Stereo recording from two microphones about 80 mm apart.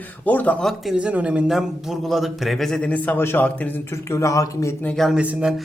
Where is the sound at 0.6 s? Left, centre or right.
Centre.